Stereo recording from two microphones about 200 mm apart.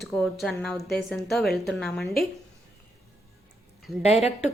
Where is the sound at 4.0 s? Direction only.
35° left (ahead or behind).